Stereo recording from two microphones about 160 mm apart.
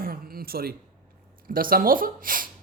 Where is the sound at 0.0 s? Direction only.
70° right (ahead or behind).